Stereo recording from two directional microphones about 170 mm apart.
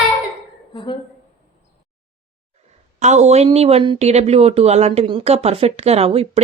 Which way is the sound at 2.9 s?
40° right (ahead or behind).